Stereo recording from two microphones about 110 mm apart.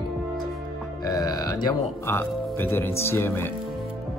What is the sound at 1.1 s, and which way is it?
Speech, 35° left (ahead or behind).